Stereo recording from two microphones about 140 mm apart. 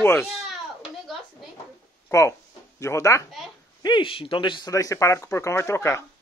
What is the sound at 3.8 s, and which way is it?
Speech, 35° left (ahead or behind).